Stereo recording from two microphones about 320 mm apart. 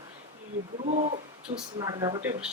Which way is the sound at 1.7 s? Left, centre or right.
Centre.